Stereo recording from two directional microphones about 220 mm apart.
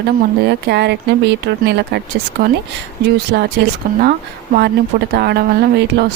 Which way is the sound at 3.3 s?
45° right (ahead or behind).